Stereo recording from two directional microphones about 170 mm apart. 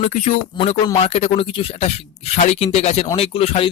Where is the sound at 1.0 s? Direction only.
35° left (ahead or behind).